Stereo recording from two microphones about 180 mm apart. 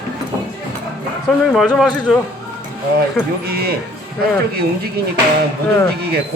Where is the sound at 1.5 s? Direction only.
Centre (ahead or behind).